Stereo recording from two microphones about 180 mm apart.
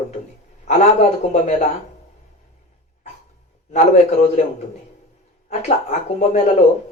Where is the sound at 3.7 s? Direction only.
40° left (ahead or behind).